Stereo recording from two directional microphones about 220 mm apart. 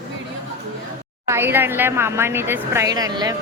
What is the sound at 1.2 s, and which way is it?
Speech, 10° right (ahead or behind).